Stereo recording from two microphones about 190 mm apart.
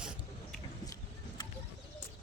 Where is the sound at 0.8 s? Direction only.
20° left (ahead or behind).